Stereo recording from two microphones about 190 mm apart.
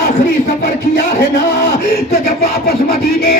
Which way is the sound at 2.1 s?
55° left (ahead or behind).